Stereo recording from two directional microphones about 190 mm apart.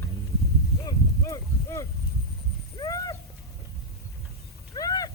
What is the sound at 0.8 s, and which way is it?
Livestock, 15° left (ahead or behind).